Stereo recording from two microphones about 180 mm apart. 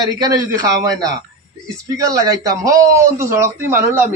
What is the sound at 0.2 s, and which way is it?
Speech, 20° right (ahead or behind).